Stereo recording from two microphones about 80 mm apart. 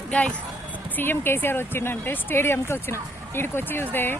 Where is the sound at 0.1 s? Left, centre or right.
Centre.